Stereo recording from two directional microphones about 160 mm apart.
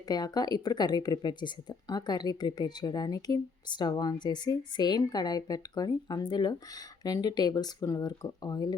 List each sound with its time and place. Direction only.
0.1 s a woman's voice: 25° left (ahead or behind)